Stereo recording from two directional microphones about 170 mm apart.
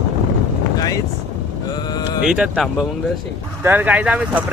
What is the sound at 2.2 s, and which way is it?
Speech, 5° right (ahead or behind).